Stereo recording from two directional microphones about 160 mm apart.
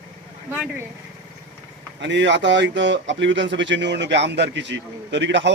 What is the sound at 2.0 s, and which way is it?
A man's voice, 90° right.